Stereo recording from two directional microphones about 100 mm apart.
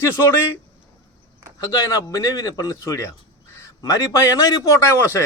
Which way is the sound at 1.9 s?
35° left (ahead or behind).